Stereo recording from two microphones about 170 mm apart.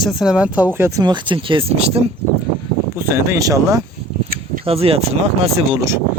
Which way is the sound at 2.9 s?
15° right (ahead or behind).